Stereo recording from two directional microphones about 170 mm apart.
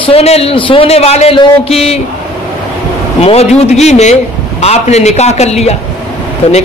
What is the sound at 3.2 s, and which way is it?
A man's voice, 35° left (ahead or behind).